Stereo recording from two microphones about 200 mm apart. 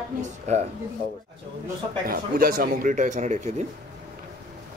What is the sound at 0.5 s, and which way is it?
Speech, 35° right (ahead or behind).